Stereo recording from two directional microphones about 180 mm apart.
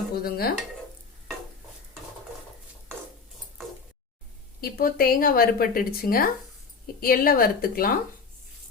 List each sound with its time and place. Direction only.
0.2 s a woman's voice: 55° left (ahead or behind)
4.6 s a woman's voice: 55° left (ahead or behind)